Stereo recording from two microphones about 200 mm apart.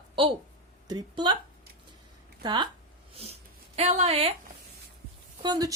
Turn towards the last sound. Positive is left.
turn(degrees=-20)  # may be behind; listen again after turning